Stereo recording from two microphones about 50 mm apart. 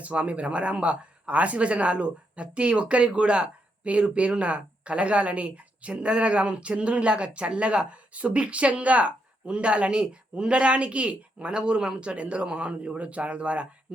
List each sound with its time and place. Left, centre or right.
0.0 s speech: right